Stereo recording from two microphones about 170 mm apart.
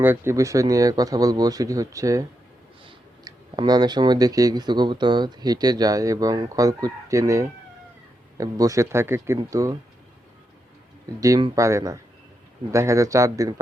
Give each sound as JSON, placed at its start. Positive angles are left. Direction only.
{"t": 0.0, "sound": "speech", "side_deg": -15}
{"t": 11.2, "sound": "speech", "side_deg": -25}